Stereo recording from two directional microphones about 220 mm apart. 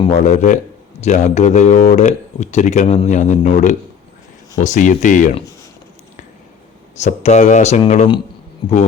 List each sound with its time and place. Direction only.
0.0 s speech: 30° left (ahead or behind)
6.9 s a man's voice: 30° left (ahead or behind)